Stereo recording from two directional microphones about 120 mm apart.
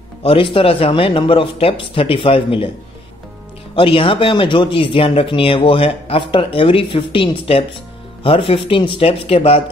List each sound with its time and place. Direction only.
0.2 s speech: 50° left (ahead or behind)
3.7 s speech: 50° left (ahead or behind)